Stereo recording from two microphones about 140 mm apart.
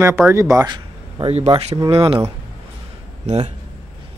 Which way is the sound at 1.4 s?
40° right (ahead or behind).